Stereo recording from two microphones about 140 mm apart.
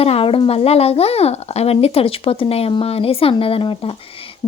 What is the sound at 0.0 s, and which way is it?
Speech, 45° left (ahead or behind).